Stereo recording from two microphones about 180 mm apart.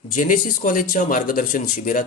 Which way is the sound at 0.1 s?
45° left (ahead or behind).